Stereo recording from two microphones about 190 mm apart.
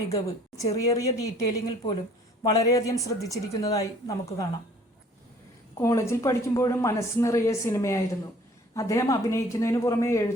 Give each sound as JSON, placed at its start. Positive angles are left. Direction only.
{"t": 0.1, "sound": "speech", "side_deg": 15}
{"t": 5.7, "sound": "speech", "side_deg": 15}